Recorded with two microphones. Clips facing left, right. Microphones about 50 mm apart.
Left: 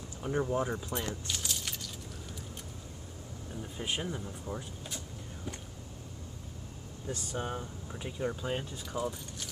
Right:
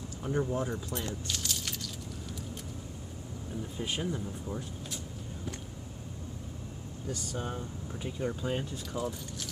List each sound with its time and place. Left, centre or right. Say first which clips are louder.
0.3 s speech: even; centre
1.2 s keys jangling: right 1 dB; centre
3.7 s speech: right 1 dB; centre
7.1 s speech: left 1 dB; left
7.9 s speech: even; centre